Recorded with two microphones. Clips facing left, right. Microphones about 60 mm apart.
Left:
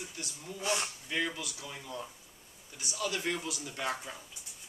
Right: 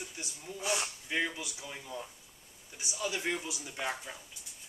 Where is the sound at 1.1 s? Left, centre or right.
Centre.